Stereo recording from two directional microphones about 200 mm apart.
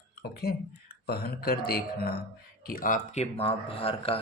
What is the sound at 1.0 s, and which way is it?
Speech, 50° left (ahead or behind).